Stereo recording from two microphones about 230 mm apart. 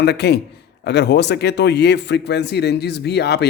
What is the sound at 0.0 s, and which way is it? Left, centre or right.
Speech, left.